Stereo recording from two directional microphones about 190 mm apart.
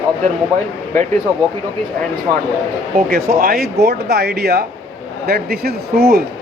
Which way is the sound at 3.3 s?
50° right (ahead or behind).